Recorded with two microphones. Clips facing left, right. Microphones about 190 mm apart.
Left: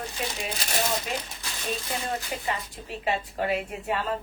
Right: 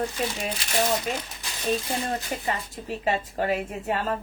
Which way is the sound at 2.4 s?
40° right (ahead or behind).